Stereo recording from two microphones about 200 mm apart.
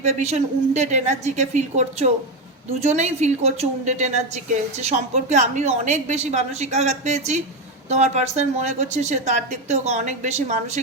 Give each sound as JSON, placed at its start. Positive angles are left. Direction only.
{"t": 0.0, "sound": "a woman's voice", "side_deg": -35}